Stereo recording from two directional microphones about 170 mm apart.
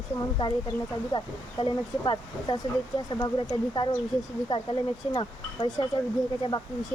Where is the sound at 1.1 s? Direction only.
30° left (ahead or behind).